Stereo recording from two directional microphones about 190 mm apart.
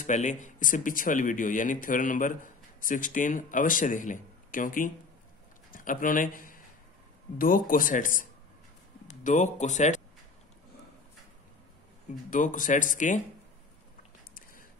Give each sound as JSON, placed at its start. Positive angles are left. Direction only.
{"t": 0.0, "sound": "speech", "side_deg": 40}
{"t": 12.3, "sound": "speech", "side_deg": 45}
{"t": 14.3, "sound": "a sound", "side_deg": 45}